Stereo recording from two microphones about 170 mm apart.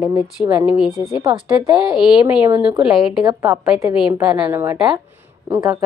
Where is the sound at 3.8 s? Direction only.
5° right (ahead or behind).